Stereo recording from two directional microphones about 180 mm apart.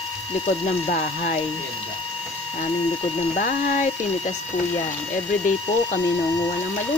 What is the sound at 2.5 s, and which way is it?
Speech, 35° left (ahead or behind).